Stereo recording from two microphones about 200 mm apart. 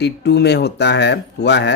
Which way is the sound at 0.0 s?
55° left (ahead or behind).